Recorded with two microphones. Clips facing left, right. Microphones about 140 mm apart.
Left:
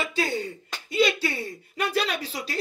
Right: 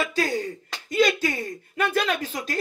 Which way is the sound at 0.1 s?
40° right (ahead or behind).